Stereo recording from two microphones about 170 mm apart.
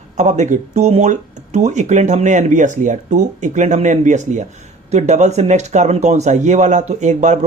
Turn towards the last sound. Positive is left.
turn(degrees=-45)  # may be behind; listen again after turning